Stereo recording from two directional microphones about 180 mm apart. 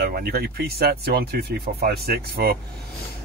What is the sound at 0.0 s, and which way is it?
Speech, 60° right (ahead or behind).